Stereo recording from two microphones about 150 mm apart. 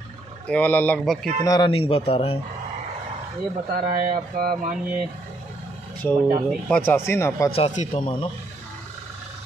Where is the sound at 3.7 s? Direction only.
80° right.